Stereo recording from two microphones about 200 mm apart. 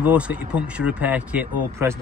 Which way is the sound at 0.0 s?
5° right (ahead or behind).